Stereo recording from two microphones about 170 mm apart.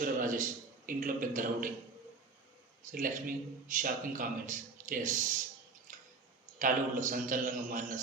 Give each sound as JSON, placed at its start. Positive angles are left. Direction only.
{"t": 0.0, "sound": "a man's voice", "side_deg": -50}
{"t": 2.8, "sound": "a man's voice", "side_deg": -50}
{"t": 5.9, "sound": "squish", "side_deg": -50}
{"t": 6.6, "sound": "a man's voice", "side_deg": -55}